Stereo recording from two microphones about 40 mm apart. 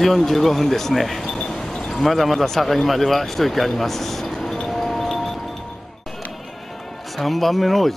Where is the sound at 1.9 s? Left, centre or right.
Centre.